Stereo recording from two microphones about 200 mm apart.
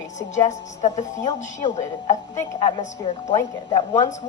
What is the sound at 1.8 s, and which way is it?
Speech, 20° left (ahead or behind).